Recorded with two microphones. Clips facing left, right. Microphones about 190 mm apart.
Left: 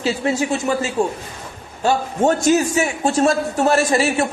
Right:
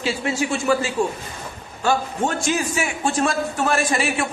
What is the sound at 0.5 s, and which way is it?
A man's voice, 40° left (ahead or behind).